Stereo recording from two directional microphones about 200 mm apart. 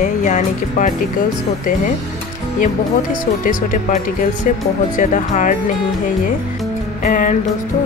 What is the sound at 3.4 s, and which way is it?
Music, 45° left (ahead or behind).